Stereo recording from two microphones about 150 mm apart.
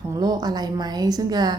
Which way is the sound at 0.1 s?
25° right (ahead or behind).